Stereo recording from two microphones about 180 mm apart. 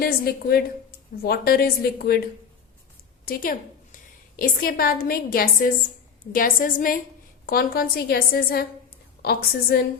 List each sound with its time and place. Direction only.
0.0 s a woman's voice: 55° left (ahead or behind)